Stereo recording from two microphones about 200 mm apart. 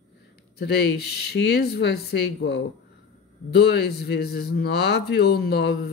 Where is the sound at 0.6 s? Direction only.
55° left (ahead or behind).